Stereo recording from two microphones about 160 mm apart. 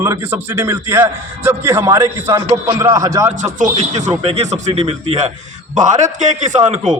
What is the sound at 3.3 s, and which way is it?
A man's voice, 50° right (ahead or behind).